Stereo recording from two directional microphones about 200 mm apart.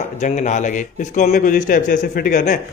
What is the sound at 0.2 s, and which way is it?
A man's voice, 35° left (ahead or behind).